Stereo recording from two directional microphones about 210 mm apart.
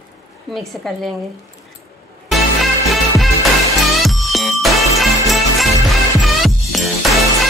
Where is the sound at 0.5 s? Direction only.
Centre (ahead or behind).